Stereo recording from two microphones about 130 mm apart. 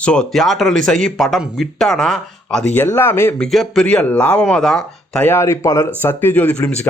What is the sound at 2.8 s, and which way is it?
Speech, 20° left (ahead or behind).